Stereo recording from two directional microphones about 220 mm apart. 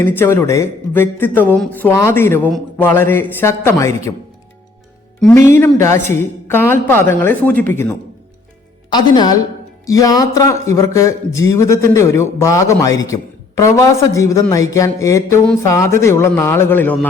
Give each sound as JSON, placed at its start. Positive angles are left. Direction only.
{"t": 0.0, "sound": "speech", "side_deg": 10}
{"t": 5.2, "sound": "speech", "side_deg": 10}